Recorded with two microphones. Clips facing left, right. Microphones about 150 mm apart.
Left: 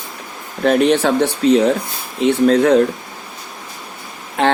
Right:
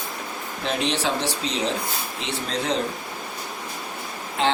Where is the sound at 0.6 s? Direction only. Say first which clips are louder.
Left 12 dB; 55° left (ahead or behind).